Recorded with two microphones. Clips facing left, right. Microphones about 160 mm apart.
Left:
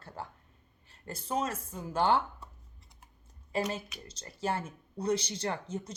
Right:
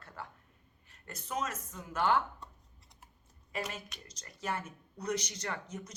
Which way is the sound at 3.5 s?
30° left (ahead or behind).